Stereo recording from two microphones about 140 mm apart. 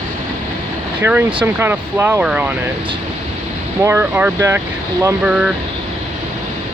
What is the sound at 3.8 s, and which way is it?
Speech, 15° right (ahead or behind).